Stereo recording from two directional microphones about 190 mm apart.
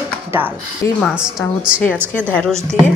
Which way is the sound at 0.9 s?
Centre (ahead or behind).